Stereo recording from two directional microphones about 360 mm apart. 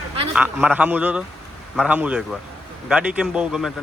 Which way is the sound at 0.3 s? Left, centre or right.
Centre.